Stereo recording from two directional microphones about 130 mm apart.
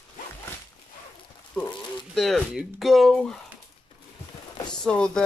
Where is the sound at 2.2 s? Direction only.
Centre (ahead or behind).